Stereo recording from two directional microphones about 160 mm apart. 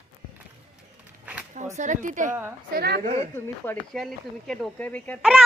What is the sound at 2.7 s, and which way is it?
Speech, 90° right.